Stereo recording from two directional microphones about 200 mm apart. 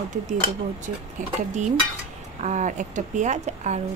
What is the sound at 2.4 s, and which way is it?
Speech, 35° right (ahead or behind).